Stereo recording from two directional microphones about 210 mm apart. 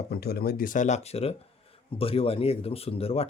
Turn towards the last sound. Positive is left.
turn(degrees=30)  # may be behind; listen again after turning